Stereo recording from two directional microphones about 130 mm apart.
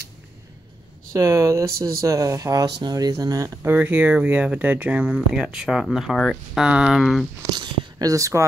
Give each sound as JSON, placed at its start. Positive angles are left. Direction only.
{"t": 1.1, "sound": "speech", "side_deg": -25}
{"t": 3.7, "sound": "speech", "side_deg": -15}
{"t": 7.5, "sound": "speech", "side_deg": -35}